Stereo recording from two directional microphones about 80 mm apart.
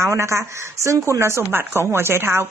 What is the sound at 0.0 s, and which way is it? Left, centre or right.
A woman's voice, right.